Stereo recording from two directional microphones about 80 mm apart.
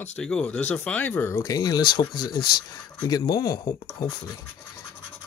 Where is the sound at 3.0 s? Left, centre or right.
Left.